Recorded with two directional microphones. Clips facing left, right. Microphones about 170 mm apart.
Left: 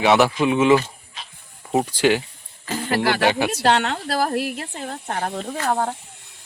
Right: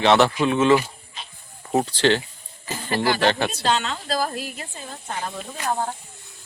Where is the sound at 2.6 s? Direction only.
70° left (ahead or behind).